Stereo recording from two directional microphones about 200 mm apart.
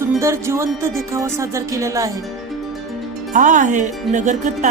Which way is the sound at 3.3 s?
40° right (ahead or behind).